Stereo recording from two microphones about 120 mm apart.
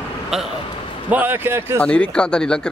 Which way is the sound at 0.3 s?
5° right (ahead or behind).